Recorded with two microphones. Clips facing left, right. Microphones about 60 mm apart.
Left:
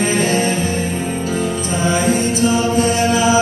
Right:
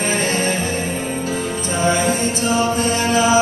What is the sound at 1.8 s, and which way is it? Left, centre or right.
Music, right.